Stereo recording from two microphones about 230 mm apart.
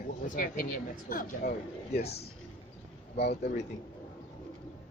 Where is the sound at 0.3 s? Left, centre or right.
Left.